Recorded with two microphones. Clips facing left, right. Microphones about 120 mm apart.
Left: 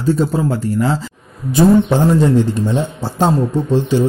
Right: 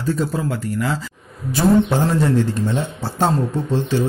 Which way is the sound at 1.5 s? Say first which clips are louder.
Left 4 dB; 20° left (ahead or behind).